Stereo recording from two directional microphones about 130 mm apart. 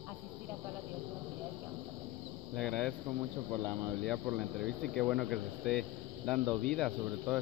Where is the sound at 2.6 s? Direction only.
5° left (ahead or behind).